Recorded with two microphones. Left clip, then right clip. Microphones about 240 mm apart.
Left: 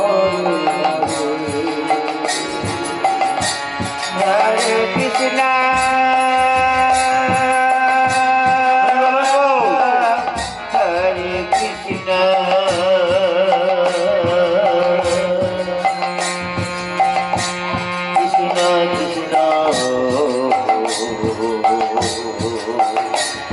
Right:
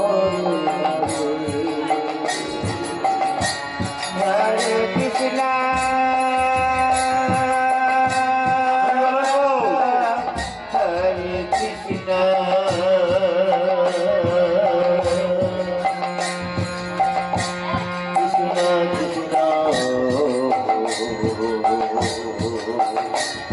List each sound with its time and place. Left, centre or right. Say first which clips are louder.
0.4 s music: left 4 dB; centre
4.7 s music: left 4 dB; centre
12.1 s music: left 3 dB; centre
18.1 s music: left 4 dB; centre